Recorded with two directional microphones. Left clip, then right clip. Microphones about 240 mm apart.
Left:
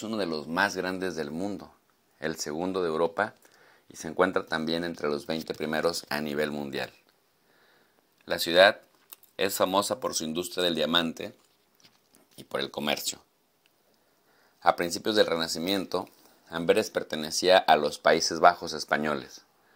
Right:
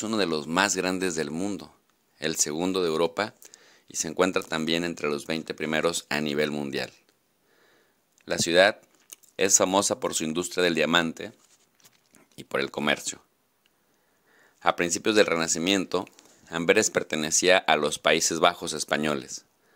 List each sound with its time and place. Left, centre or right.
0.0 s speech: right
0.9 s speech: right
5.2 s speech: centre
8.3 s speech: right
11.2 s speech: centre
12.4 s speech: right
12.8 s speech: centre
14.6 s speech: right
16.9 s speech: right